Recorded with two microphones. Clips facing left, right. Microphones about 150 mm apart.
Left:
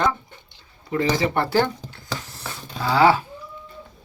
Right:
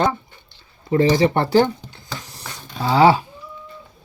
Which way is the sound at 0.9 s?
30° right (ahead or behind).